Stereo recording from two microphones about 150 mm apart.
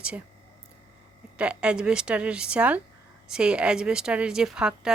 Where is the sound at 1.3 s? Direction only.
5° right (ahead or behind).